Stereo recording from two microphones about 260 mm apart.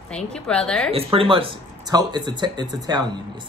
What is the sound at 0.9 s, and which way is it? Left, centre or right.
A man's voice, right.